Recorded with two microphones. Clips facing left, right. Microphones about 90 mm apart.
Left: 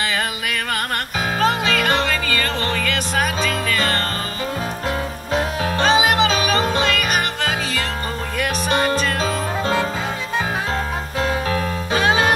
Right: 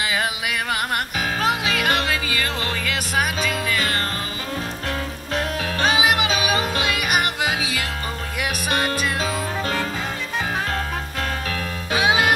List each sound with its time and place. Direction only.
0.0 s music: 10° right (ahead or behind)
5.8 s music: 5° right (ahead or behind)
9.2 s music: 25° left (ahead or behind)
11.9 s music: 10° right (ahead or behind)